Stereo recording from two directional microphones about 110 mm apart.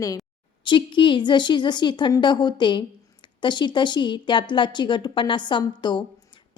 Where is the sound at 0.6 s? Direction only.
45° left (ahead or behind).